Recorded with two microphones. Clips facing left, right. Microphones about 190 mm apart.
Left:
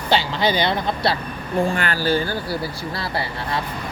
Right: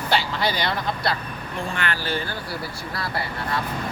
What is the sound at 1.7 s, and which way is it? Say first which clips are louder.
Speech: left 6 dB; 35° left (ahead or behind).